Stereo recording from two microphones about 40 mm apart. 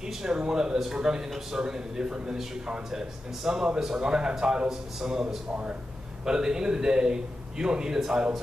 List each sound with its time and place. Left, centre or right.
0.1 s a man's voice: centre
5.5 s speech: right
6.2 s a man's voice: centre